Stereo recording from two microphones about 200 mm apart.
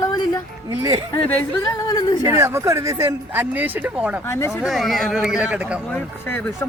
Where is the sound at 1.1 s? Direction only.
5° left (ahead or behind).